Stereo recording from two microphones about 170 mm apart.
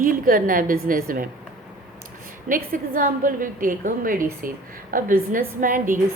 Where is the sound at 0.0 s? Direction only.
55° right (ahead or behind).